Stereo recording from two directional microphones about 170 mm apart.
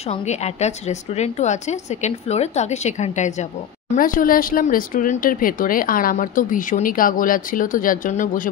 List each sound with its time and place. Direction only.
0.0 s a woman's voice: 40° left (ahead or behind)